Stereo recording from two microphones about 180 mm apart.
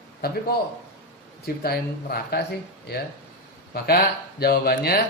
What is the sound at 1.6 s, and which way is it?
Speech, 60° left (ahead or behind).